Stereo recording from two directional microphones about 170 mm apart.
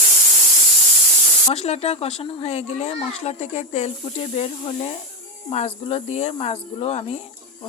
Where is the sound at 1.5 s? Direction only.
40° left (ahead or behind).